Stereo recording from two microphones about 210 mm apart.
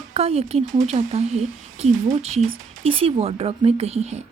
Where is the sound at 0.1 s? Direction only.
30° right (ahead or behind).